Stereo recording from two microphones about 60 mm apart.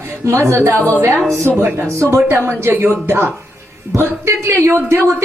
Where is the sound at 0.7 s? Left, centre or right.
Left.